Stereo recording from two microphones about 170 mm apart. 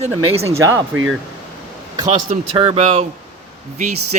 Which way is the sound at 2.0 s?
25° right (ahead or behind).